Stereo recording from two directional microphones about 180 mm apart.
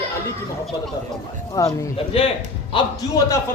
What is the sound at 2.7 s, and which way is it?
Speech, 20° left (ahead or behind).